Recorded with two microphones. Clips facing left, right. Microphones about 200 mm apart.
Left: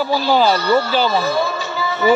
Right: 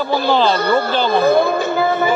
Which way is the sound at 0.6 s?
55° right (ahead or behind).